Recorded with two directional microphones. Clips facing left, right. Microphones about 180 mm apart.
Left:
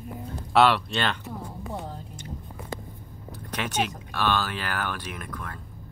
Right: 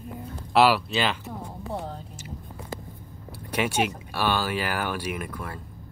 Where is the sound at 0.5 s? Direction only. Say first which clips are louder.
Right 1 dB; 5° right (ahead or behind).